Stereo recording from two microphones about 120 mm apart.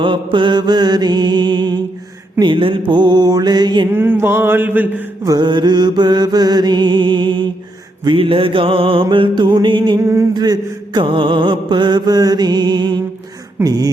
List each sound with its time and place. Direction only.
0.0 s mantra: 40° right (ahead or behind)
3.8 s mantra: 20° right (ahead or behind)
5.2 s mantra: 35° right (ahead or behind)
8.0 s music: 50° right (ahead or behind)
10.0 s a sound: 20° right (ahead or behind)
10.3 s mantra: 35° right (ahead or behind)